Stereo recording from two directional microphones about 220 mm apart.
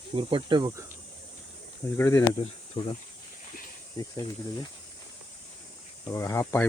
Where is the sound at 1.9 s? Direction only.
10° left (ahead or behind).